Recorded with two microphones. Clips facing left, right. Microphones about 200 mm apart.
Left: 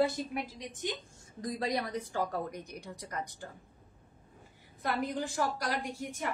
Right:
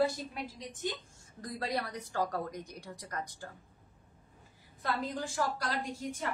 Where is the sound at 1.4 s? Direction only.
15° left (ahead or behind).